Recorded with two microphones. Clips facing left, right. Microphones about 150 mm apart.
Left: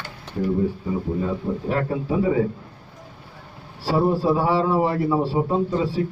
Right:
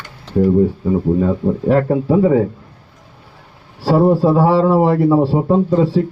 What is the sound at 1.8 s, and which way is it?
Speech, 50° right (ahead or behind).